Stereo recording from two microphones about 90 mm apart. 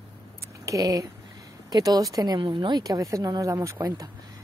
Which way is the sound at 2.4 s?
65° right (ahead or behind).